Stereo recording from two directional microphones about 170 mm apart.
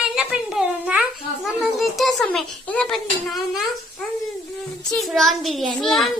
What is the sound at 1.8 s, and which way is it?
Speech, centre (ahead or behind).